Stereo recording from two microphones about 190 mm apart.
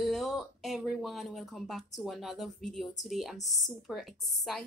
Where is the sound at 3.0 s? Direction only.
Centre (ahead or behind).